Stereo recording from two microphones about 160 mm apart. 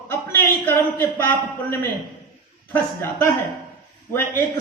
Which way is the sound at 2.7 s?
15° left (ahead or behind).